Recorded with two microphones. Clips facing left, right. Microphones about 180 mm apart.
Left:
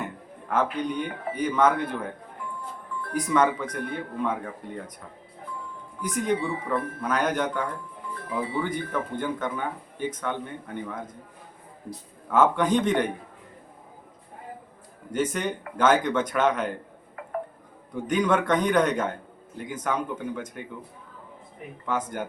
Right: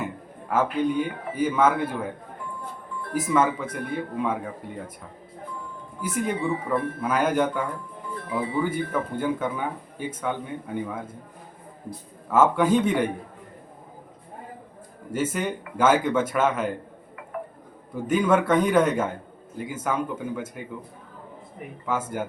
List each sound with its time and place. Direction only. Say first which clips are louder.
0.5 s speech: right 3 dB; 5° right (ahead or behind)
3.1 s speech: even; 5° right (ahead or behind)
6.0 s speech: left 1 dB; 5° right (ahead or behind)
12.3 s speech: right 2 dB; 5° right (ahead or behind)
15.1 s speech: even; 5° right (ahead or behind)
18.1 s speech: right 3 dB; 5° right (ahead or behind)
21.8 s speech: right 1 dB; 5° right (ahead or behind)